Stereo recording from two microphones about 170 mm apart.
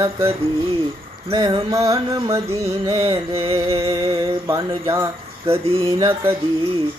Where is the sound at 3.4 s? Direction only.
35° right (ahead or behind).